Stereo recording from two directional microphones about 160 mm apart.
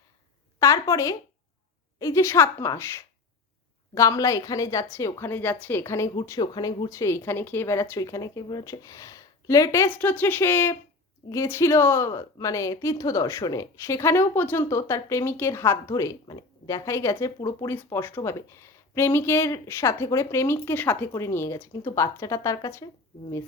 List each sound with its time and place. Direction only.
0.6 s a woman's voice: 20° left (ahead or behind)